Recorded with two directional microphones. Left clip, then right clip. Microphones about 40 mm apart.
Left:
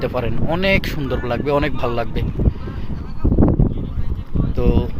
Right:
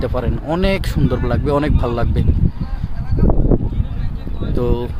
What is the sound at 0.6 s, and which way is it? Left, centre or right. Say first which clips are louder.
Speech: left 4 dB; centre.